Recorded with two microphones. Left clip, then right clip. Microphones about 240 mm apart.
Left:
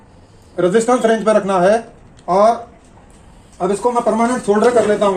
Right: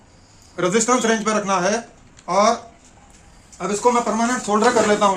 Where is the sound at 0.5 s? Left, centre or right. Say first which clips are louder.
Left 4 dB; right.